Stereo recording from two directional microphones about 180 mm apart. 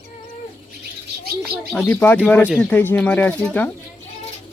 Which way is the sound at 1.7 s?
10° left (ahead or behind).